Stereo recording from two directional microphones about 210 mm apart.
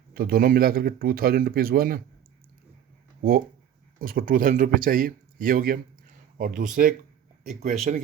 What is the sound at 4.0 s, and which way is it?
Speech, 40° right (ahead or behind).